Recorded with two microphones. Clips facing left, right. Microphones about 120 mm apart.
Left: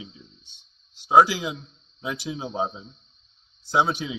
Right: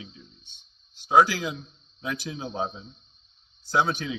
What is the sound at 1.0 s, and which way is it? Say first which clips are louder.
A man's voice: left 2 dB; 20° left (ahead or behind).